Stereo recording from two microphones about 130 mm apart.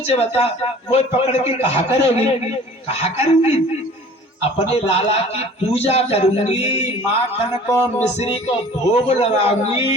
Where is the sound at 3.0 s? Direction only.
55° left (ahead or behind).